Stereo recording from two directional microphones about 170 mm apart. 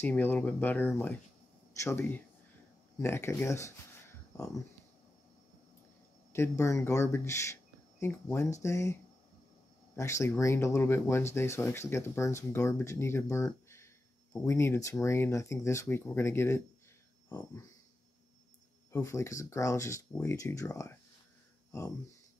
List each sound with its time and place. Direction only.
0.0 s speech: 10° left (ahead or behind)
6.3 s speech: 15° left (ahead or behind)
9.9 s speech: 15° left (ahead or behind)
18.9 s speech: 15° left (ahead or behind)